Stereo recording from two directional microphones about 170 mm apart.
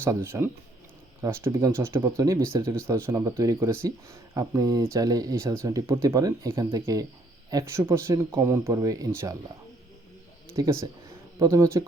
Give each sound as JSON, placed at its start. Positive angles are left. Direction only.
{"t": 0.0, "sound": "speech", "side_deg": -15}
{"t": 10.5, "sound": "speech", "side_deg": -15}